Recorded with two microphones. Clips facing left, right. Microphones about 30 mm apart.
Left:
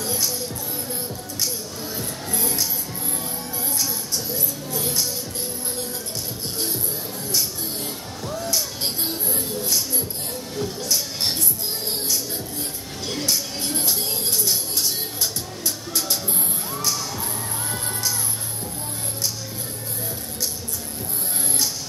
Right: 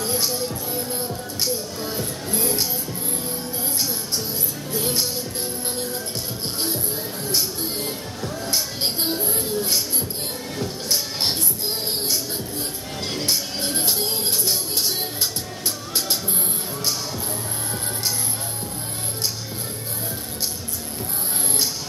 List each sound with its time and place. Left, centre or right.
0.0 s music: right
7.2 s music: right
10.5 s music: right
13.3 s music: right
14.4 s music: right